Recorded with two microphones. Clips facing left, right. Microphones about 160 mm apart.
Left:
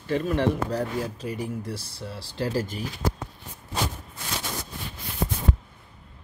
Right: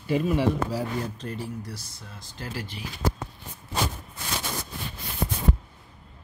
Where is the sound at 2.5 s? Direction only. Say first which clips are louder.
Left 4 dB; 45° left (ahead or behind).